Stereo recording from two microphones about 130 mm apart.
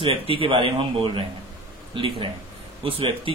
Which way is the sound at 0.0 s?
45° right (ahead or behind).